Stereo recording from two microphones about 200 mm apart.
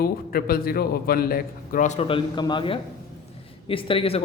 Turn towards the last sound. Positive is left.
turn(degrees=30)  # may be behind; listen again after turning